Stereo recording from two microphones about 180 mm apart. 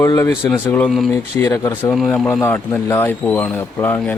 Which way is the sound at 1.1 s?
20° left (ahead or behind).